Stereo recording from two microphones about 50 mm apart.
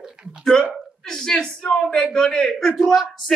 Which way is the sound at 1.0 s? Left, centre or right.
Centre.